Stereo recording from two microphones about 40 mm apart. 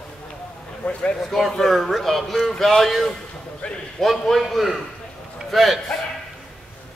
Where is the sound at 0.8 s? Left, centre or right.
Left.